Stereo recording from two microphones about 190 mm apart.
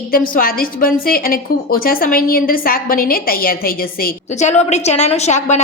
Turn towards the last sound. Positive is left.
turn(degrees=35)  # may be behind; listen again after turning